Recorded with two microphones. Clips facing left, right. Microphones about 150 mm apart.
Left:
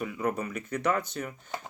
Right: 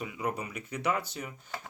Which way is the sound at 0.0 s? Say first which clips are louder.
Left 4 dB; 10° right (ahead or behind).